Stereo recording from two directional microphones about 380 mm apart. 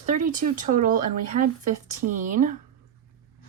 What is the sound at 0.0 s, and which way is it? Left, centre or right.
Speech, centre.